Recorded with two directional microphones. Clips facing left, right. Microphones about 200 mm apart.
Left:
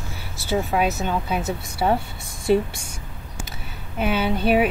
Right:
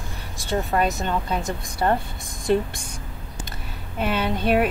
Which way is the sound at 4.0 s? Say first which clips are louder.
Left 2 dB; 5° left (ahead or behind).